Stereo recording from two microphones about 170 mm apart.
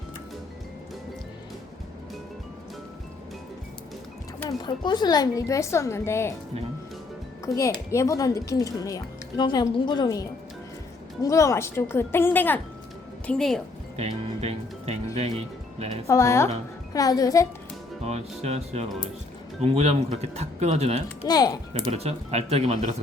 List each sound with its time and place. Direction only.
4.4 s speech: 25° left (ahead or behind)
7.4 s speech: 20° left (ahead or behind); by 13.6 s 5° left (ahead or behind)
13.9 s speech: 40° right (ahead or behind)
16.0 s speech: 15° left (ahead or behind)
18.0 s speech: 40° right (ahead or behind)
21.2 s speech: 25° left (ahead or behind)
21.7 s speech: 35° right (ahead or behind)